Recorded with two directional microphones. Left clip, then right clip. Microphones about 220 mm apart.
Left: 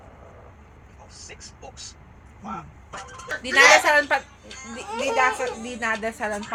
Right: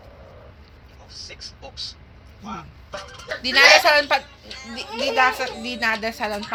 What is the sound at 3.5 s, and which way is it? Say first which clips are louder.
A woman's voice: right 2 dB; 10° left (ahead or behind).